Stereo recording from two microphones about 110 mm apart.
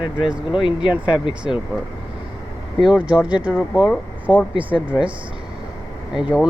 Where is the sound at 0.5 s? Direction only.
50° left (ahead or behind).